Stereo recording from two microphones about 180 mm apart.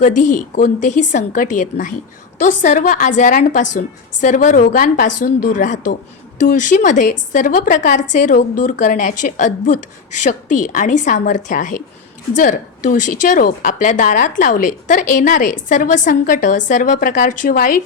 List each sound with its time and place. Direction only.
0.0 s a woman's voice: 45° left (ahead or behind)